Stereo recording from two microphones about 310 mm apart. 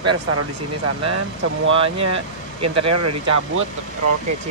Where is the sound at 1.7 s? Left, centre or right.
Centre.